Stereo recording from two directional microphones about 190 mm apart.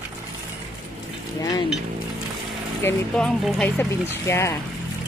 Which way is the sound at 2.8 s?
5° left (ahead or behind).